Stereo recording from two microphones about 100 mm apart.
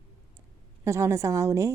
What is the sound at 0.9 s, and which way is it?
Speech, 30° right (ahead or behind).